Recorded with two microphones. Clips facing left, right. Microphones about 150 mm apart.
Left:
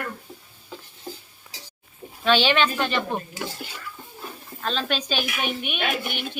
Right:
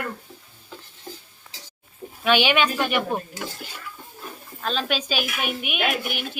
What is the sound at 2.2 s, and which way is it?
Speech, 10° right (ahead or behind).